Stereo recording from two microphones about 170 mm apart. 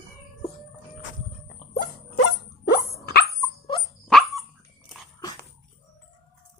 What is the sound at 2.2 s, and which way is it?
Dog, 90° left.